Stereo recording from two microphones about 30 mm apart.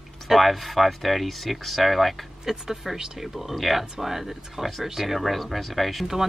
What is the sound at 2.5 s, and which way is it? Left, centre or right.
Speech, centre.